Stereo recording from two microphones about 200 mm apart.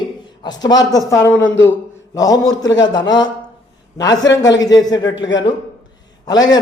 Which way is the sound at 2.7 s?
20° left (ahead or behind).